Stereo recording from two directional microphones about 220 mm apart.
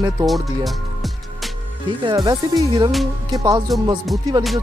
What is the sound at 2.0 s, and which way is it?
Speech, 15° right (ahead or behind).